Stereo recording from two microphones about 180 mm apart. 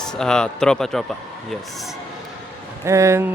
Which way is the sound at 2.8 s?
15° right (ahead or behind).